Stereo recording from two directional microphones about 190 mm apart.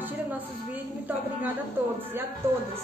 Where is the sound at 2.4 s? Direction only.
15° right (ahead or behind).